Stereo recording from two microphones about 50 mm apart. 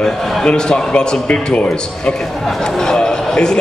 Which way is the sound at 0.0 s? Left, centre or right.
Centre.